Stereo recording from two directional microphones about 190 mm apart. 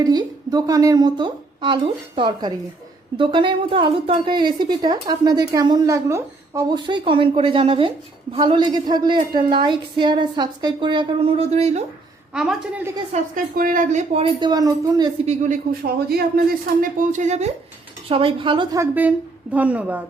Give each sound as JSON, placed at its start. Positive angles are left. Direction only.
{"t": 0.0, "sound": "speech", "side_deg": -20}
{"t": 12.3, "sound": "a woman's voice", "side_deg": -5}
{"t": 13.3, "sound": "speech", "side_deg": -45}
{"t": 14.2, "sound": "speech", "side_deg": -25}
{"t": 15.3, "sound": "speech", "side_deg": -35}
{"t": 16.0, "sound": "speech", "side_deg": -50}
{"t": 19.5, "sound": "speech", "side_deg": -10}